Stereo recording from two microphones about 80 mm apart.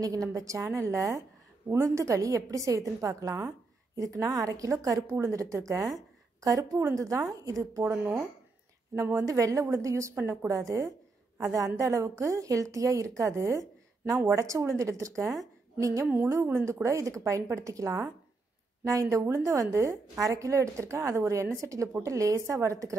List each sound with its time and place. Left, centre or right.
0.0 s a woman's voice: right
7.8 s speech: right
8.9 s a woman's voice: right
16.4 s a woman's voice: right